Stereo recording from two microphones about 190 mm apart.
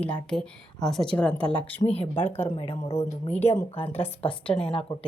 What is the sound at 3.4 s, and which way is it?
Speech, 35° left (ahead or behind).